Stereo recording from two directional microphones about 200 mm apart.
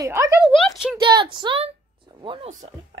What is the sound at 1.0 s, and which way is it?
A woman's voice, 25° right (ahead or behind).